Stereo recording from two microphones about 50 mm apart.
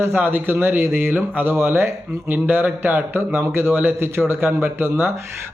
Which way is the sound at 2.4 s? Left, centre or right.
Right.